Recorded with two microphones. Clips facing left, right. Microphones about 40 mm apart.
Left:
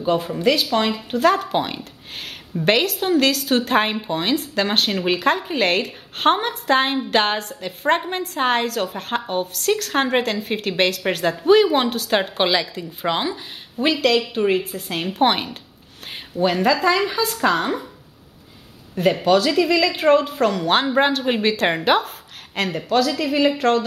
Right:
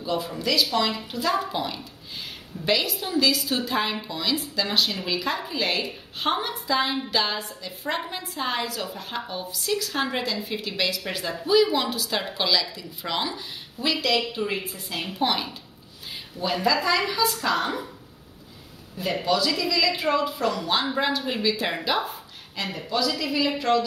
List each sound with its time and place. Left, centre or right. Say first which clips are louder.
0.0 s speech: left 8 dB; left
13.7 s speech: left 6 dB; left
19.2 s speech: left 6 dB; left